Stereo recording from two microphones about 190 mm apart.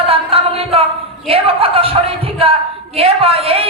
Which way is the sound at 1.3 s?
30° right (ahead or behind).